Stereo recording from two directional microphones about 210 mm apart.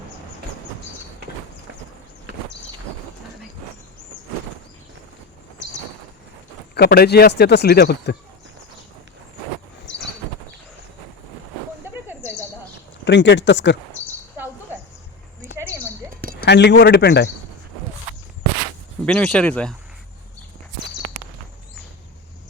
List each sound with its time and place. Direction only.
6.7 s speech: 50° left (ahead or behind)
13.1 s a man's voice: 55° left (ahead or behind)
14.3 s a sound: 10° right (ahead or behind)
16.5 s a man's voice: 55° left (ahead or behind)
19.0 s speech: 5° left (ahead or behind)